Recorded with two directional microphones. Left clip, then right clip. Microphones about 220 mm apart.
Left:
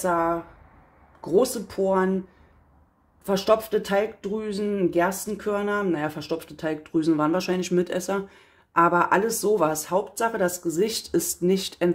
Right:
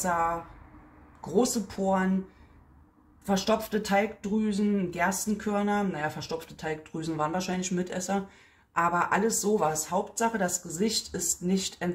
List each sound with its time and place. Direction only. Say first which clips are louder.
1.2 s speech: left 5 dB; 35° left (ahead or behind)
3.3 s speech: left 6 dB; 40° left (ahead or behind)